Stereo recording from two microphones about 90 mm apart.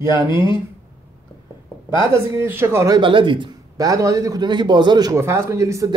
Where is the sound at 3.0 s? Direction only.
65° right (ahead or behind).